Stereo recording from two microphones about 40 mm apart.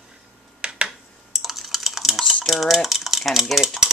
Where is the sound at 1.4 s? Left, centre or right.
Centre.